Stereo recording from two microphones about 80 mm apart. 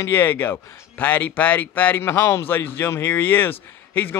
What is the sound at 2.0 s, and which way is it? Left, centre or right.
Speech, left.